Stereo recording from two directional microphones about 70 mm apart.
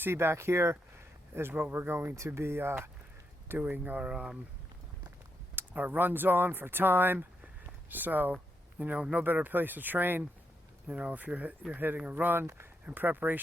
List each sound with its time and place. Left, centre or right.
0.0 s speech: right
3.6 s speech: right
4.1 s speech: centre
5.5 s speech: right
10.8 s speech: centre